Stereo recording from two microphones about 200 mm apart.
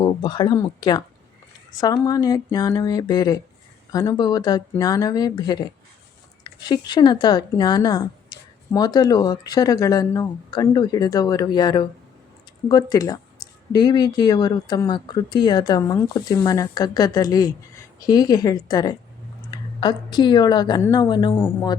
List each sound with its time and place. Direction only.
0.0 s a woman's voice: 20° left (ahead or behind)